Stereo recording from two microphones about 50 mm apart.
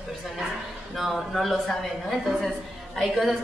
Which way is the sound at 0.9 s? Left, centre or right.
Centre.